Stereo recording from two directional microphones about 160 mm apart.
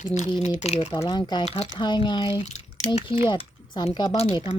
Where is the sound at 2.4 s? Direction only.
45° left (ahead or behind).